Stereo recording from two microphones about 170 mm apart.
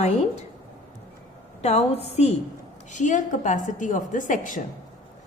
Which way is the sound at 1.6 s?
40° left (ahead or behind).